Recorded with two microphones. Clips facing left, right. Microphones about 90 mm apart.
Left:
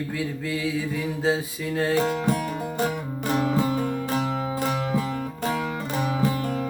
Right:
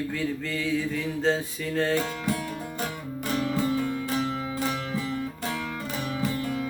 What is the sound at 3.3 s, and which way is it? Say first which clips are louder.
Music: left 4 dB; 55° left (ahead or behind).